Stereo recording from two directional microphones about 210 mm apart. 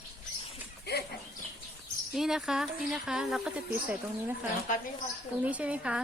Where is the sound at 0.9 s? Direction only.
50° left (ahead or behind).